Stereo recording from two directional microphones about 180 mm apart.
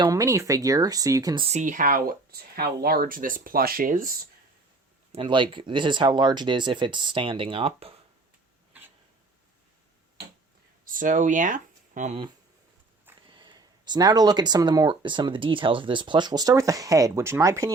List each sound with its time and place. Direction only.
0.0 s speech: 20° right (ahead or behind)
1.5 s speech: 40° right (ahead or behind)
5.1 s speech: 25° right (ahead or behind)
10.9 s speech: 45° right (ahead or behind)
13.3 s speech: 25° right (ahead or behind)